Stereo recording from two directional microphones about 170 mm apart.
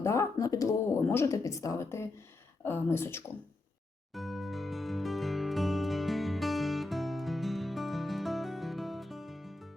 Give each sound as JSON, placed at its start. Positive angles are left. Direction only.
{"t": 0.0, "sound": "a sound", "side_deg": 15}
{"t": 2.6, "sound": "speech", "side_deg": 15}
{"t": 4.1, "sound": "music", "side_deg": 0}